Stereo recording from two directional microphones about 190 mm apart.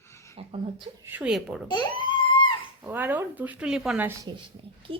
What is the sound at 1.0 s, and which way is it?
Speech, 10° right (ahead or behind).